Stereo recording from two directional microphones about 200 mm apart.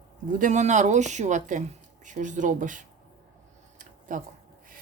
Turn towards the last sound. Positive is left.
turn(degrees=-40)  # may be behind; listen again after turning